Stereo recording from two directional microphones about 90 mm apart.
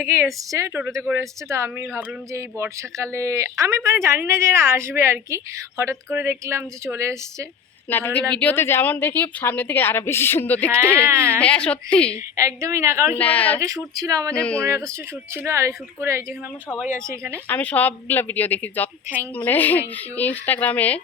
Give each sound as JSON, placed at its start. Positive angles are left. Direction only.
{"t": 0.0, "sound": "a woman's voice", "side_deg": -25}
{"t": 7.9, "sound": "speech", "side_deg": 25}
{"t": 11.1, "sound": "a woman's voice", "side_deg": -25}
{"t": 11.3, "sound": "a woman's voice", "side_deg": 15}
{"t": 12.1, "sound": "speech", "side_deg": -35}
{"t": 13.1, "sound": "a woman's voice", "side_deg": 15}
{"t": 13.6, "sound": "speech", "side_deg": -40}
{"t": 14.3, "sound": "a woman's voice", "side_deg": 15}
{"t": 14.6, "sound": "speech", "side_deg": -35}
{"t": 17.5, "sound": "speech", "side_deg": 20}